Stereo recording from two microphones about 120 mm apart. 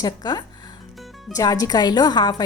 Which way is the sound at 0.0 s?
30° left (ahead or behind).